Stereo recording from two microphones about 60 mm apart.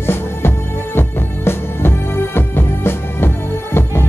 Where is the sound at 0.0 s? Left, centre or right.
Left.